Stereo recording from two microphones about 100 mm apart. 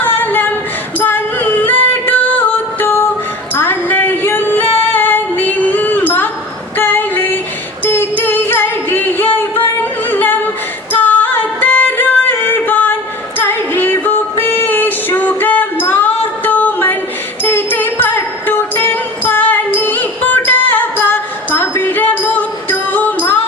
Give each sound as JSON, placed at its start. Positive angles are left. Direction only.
{"t": 0.0, "sound": "a sound", "side_deg": 20}
{"t": 0.9, "sound": "music", "side_deg": 20}
{"t": 6.7, "sound": "female singing", "side_deg": 20}
{"t": 7.9, "sound": "singing", "side_deg": 20}
{"t": 10.9, "sound": "music", "side_deg": 20}